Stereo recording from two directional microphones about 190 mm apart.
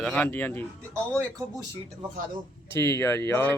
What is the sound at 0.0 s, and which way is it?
Speech, 5° left (ahead or behind).